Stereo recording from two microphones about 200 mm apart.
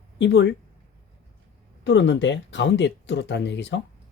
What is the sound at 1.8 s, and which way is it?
Speech, 65° left (ahead or behind).